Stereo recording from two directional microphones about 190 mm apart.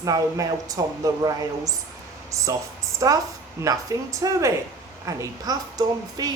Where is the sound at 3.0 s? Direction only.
20° right (ahead or behind).